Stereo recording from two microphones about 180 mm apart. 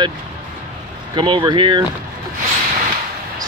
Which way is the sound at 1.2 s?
25° right (ahead or behind).